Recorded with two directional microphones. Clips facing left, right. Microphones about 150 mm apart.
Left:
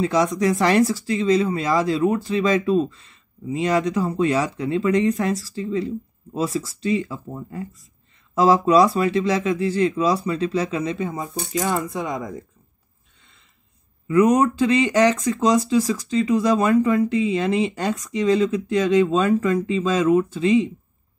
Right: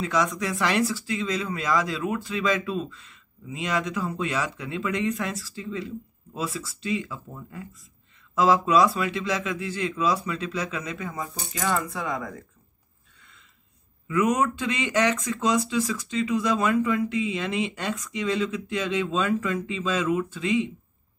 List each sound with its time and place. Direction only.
0.0 s speech: 35° left (ahead or behind); by 12.4 s 15° left (ahead or behind)
14.0 s speech: 35° left (ahead or behind)